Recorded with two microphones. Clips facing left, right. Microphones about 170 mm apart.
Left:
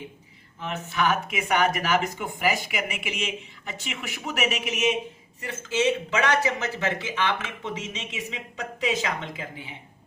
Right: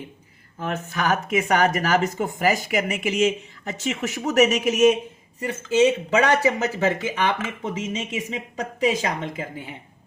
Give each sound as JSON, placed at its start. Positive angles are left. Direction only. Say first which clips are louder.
{"t": 0.6, "sound": "speech", "louder": "right 1 dB", "side_deg": -45}
{"t": 6.1, "sound": "speech", "louder": "right 5 dB", "side_deg": -45}